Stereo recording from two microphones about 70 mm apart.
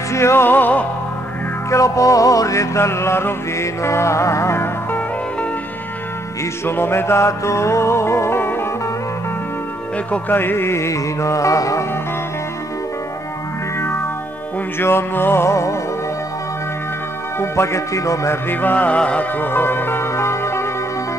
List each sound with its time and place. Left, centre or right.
0.1 s music: left
1.7 s music: left
6.6 s music: left
10.1 s music: left
13.7 s music: left
17.4 s music: left
18.5 s music: left